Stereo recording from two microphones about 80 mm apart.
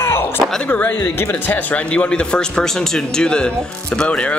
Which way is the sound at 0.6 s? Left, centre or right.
Left.